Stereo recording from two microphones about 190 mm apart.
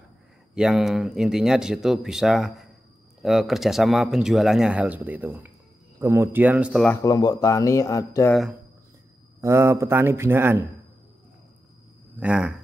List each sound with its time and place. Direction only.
0.6 s a man's voice: centre (ahead or behind)
6.9 s speech: 20° left (ahead or behind)
8.3 s speech: centre (ahead or behind)
9.4 s a man's voice: 15° right (ahead or behind)
12.2 s speech: 5° right (ahead or behind)